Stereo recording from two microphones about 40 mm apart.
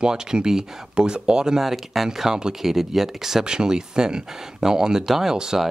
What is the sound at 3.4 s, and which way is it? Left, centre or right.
Speech, centre.